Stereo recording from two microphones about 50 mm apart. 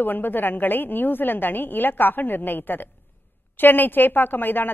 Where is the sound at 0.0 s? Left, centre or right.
Left.